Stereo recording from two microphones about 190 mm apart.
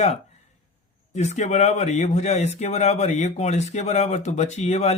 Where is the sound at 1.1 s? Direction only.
35° left (ahead or behind).